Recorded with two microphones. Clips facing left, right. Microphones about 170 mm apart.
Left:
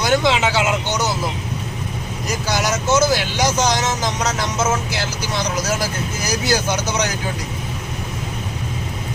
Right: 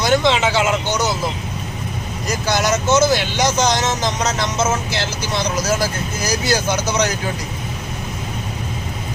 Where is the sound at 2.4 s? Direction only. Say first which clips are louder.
Right 2 dB; 10° left (ahead or behind).